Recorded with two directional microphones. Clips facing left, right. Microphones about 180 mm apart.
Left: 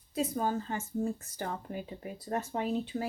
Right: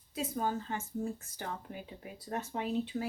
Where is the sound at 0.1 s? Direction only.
40° left (ahead or behind).